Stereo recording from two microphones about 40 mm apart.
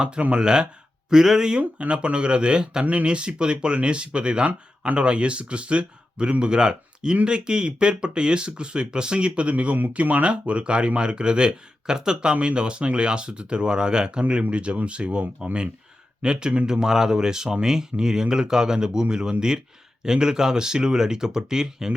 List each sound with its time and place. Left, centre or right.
0.3 s speech: right
1.8 s speech: right
2.8 s speech: right; by 21.9 s centre